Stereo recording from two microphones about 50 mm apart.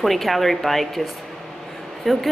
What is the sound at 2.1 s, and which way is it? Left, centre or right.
Speech, centre.